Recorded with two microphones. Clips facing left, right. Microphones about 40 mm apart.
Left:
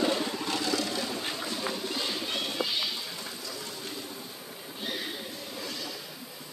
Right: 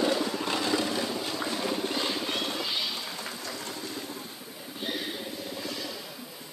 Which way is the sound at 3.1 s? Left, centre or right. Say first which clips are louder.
Right 2 dB; right.